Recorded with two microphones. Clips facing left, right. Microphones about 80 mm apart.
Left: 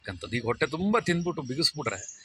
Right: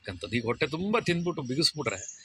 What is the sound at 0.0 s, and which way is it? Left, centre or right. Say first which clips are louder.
Speech: even; left.